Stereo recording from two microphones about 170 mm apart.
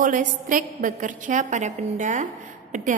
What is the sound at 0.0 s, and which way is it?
A woman's voice, 50° right (ahead or behind).